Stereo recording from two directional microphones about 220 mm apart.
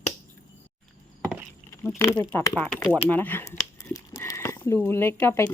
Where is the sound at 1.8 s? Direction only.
10° left (ahead or behind).